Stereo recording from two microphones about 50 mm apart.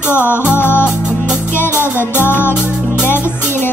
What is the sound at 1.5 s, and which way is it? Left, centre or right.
Music, left.